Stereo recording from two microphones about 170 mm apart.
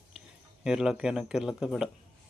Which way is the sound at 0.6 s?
5° right (ahead or behind).